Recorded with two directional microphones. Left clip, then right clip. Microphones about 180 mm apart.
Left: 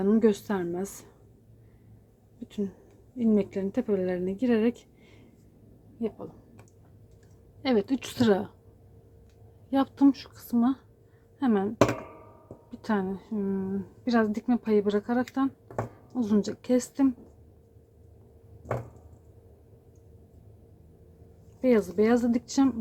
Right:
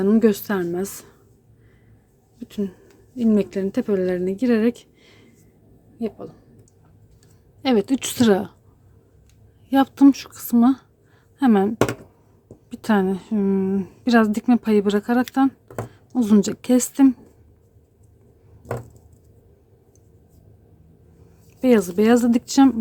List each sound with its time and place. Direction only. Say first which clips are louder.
0.0 s a woman's voice: right 6 dB; 30° right (ahead or behind)
2.5 s a woman's voice: right 6 dB; 25° right (ahead or behind)
7.6 s speech: right 6 dB; 35° right (ahead or behind)
9.6 s speech: right 8 dB; 40° right (ahead or behind)
12.7 s speech: right 9 dB; 45° right (ahead or behind)
21.6 s speech: right 6 dB; 40° right (ahead or behind)